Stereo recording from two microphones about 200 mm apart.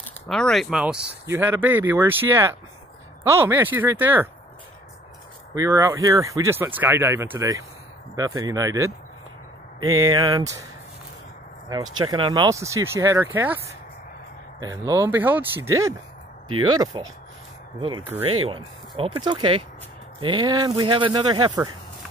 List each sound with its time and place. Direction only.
0.3 s speech: centre (ahead or behind)
5.5 s speech: 15° right (ahead or behind)
12.1 s speech: 20° right (ahead or behind)
16.4 s speech: 90° right
16.7 s speech: 20° right (ahead or behind)